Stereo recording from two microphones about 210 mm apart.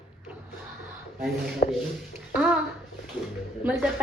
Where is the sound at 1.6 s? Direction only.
50° left (ahead or behind).